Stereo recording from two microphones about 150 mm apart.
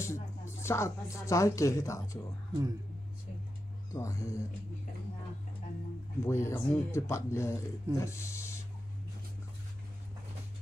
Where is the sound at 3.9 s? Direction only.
20° left (ahead or behind).